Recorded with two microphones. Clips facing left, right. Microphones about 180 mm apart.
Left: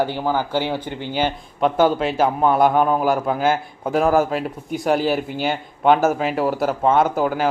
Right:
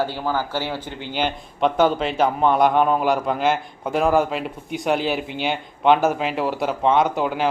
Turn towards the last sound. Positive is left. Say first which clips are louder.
# left 2 dB
turn(degrees=0)  # may be behind; listen again after turning